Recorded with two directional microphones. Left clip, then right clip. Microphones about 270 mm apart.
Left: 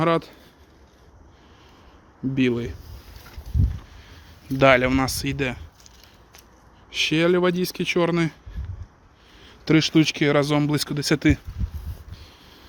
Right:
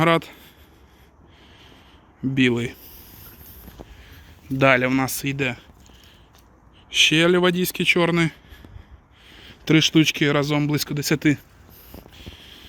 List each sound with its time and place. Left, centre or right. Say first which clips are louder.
0.0 s speech: right 2 dB; centre
2.3 s speech: right 3 dB; centre
4.0 s speech: even; centre
6.9 s speech: right 4 dB; centre
12.1 s a sound: right 7 dB; centre